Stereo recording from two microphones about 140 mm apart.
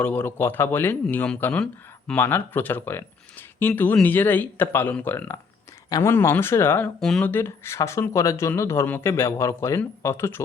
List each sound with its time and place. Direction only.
0.0 s speech: 15° left (ahead or behind)
7.0 s speech: 5° left (ahead or behind)
7.3 s speech: 15° left (ahead or behind)